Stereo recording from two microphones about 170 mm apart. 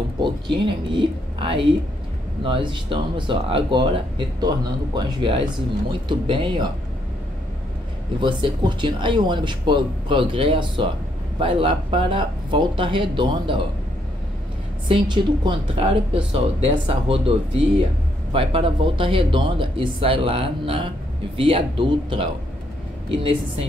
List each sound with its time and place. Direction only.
0.2 s speech: 30° right (ahead or behind)
8.2 s speech: 30° right (ahead or behind)
14.9 s speech: 30° right (ahead or behind)
18.3 s speech: 35° right (ahead or behind)